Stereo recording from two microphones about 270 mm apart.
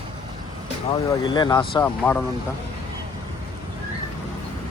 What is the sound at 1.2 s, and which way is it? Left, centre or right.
A man's voice, centre.